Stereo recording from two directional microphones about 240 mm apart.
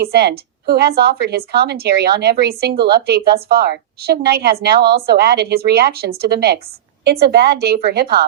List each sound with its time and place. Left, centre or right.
0.0 s a woman's voice: right